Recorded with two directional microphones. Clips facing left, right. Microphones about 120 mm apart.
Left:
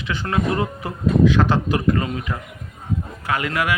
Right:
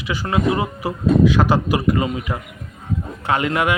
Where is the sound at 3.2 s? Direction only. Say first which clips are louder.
Right 4 dB; 25° right (ahead or behind).